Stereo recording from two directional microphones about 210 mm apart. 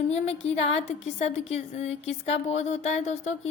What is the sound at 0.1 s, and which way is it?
A woman's voice, 30° left (ahead or behind).